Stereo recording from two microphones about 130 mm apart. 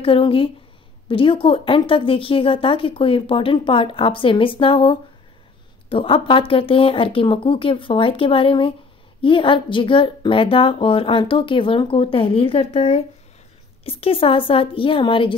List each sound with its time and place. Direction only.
0.0 s a woman's voice: 45° left (ahead or behind)